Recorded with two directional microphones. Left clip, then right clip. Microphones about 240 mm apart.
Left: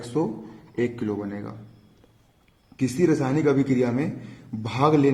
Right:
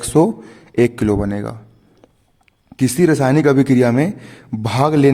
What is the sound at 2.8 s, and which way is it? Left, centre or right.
A man's voice, right.